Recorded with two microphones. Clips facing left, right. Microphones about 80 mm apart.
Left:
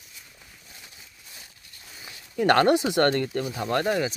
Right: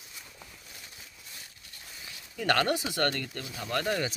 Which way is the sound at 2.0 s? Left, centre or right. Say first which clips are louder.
Left 7 dB; left.